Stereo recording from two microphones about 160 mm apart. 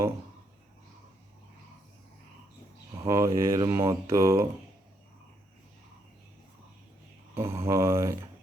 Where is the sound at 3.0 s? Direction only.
20° right (ahead or behind).